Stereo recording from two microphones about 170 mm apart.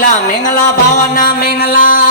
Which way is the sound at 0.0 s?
50° left (ahead or behind).